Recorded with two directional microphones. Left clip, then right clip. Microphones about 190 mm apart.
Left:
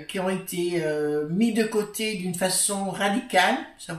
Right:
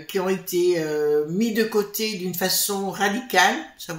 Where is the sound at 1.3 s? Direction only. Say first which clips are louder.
Right 2 dB; 35° right (ahead or behind).